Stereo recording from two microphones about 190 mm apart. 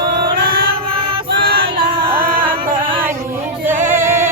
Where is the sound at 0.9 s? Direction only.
30° right (ahead or behind).